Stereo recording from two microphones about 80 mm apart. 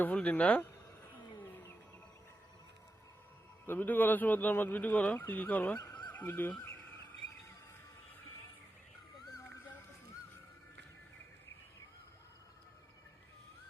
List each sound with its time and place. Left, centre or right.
0.0 s speech: centre
3.7 s speech: left
5.8 s neigh: left
6.1 s speech: left